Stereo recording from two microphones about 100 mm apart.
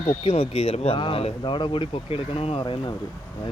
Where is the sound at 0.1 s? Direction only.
90° left.